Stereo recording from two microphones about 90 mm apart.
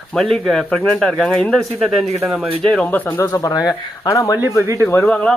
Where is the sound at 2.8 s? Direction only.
20° left (ahead or behind).